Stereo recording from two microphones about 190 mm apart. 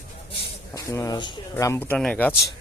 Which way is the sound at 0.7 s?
15° left (ahead or behind).